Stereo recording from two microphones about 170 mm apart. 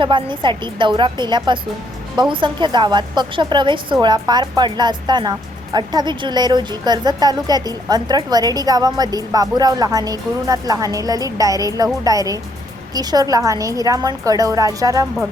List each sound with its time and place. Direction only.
0.0 s a woman's voice: 30° right (ahead or behind)